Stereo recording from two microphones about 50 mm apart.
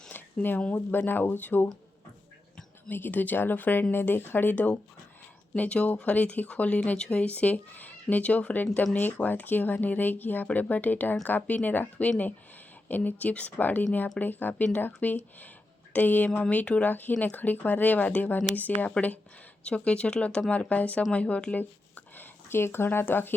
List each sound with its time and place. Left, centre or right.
0.1 s a sound: left
0.9 s speech: left
2.9 s speech: left
5.5 s speech: left
9.2 s speech: left
19.6 s speech: left
21.6 s a sound: left
23.0 s speech: left